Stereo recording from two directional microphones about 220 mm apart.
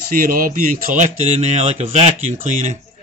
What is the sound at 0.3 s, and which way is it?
Speech, 40° right (ahead or behind).